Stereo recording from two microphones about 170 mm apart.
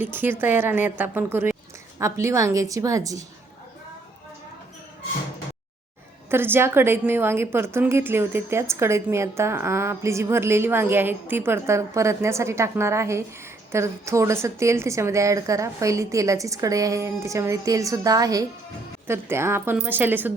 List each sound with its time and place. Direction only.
0.0 s a woman's voice: 10° right (ahead or behind)
6.3 s a woman's voice: 15° right (ahead or behind)